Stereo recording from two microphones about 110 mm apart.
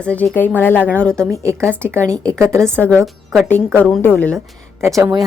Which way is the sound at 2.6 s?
5° left (ahead or behind).